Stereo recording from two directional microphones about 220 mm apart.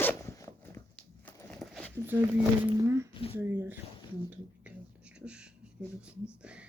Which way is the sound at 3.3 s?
10° right (ahead or behind).